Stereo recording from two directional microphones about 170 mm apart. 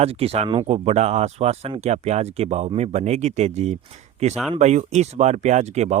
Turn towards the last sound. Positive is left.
turn(degrees=-40)  # may be behind; listen again after turning